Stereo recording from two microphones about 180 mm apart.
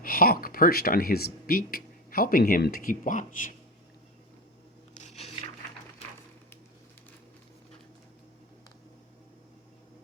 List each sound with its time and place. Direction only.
0.0 s speech: 55° left (ahead or behind)
4.9 s biting: 40° left (ahead or behind)